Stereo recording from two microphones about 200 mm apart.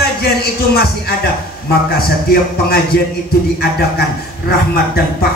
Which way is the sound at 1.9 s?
50° left (ahead or behind).